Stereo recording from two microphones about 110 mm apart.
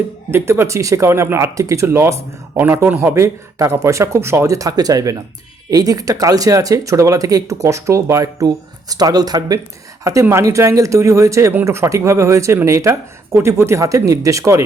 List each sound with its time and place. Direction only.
0.3 s speech: 20° right (ahead or behind)